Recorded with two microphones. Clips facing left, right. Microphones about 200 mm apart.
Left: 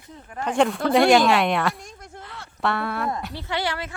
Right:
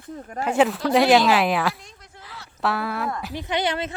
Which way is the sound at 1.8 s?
45° left (ahead or behind).